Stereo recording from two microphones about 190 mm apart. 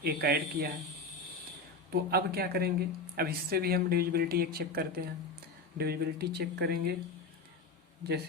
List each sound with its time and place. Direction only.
0.0 s speech: 55° right (ahead or behind)
1.9 s speech: 55° right (ahead or behind)